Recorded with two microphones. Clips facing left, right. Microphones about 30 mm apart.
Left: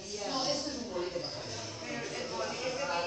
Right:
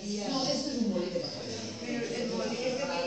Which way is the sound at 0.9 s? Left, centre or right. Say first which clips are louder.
Right 3 dB; centre.